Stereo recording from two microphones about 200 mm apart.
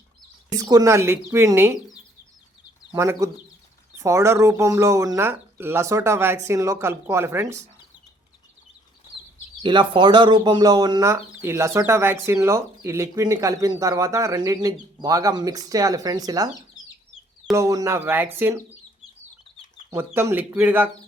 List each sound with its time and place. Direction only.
0.6 s speech: 15° right (ahead or behind)
2.9 s speech: 15° right (ahead or behind)
9.6 s speech: 25° right (ahead or behind)
17.5 s speech: 15° right (ahead or behind)
19.9 s speech: 10° right (ahead or behind)